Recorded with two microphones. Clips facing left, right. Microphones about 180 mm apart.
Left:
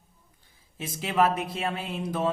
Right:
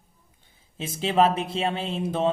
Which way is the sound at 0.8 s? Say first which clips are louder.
Right 3 dB; 25° right (ahead or behind).